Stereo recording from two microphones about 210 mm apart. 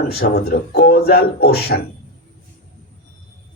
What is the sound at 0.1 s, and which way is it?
A man's voice, 50° left (ahead or behind).